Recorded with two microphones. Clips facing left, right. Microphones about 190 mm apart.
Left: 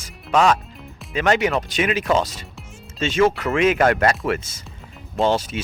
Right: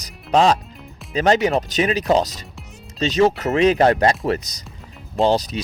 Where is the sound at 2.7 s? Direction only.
40° right (ahead or behind).